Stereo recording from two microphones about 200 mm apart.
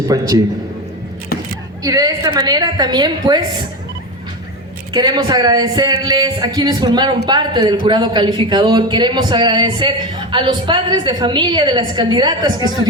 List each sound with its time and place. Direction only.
0.1 s a man's voice: 20° right (ahead or behind)
1.8 s a woman's voice: 20° right (ahead or behind)
4.9 s a woman's voice: 20° right (ahead or behind)